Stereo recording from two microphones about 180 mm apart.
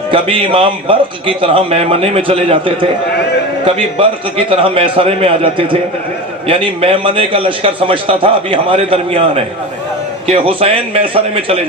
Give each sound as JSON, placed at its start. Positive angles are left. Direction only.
{"t": 0.1, "sound": "a man's voice", "side_deg": -30}
{"t": 3.9, "sound": "a man's voice", "side_deg": -30}